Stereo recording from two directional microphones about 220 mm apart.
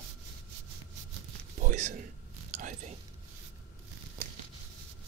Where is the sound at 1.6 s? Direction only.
35° right (ahead or behind).